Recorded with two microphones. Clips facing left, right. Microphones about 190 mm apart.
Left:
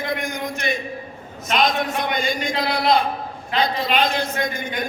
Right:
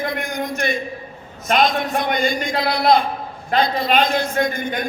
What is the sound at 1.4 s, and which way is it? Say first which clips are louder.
A man's voice: right 2 dB; 50° right (ahead or behind).